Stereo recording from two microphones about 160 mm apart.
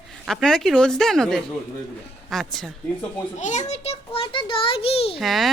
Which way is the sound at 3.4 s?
50° left (ahead or behind).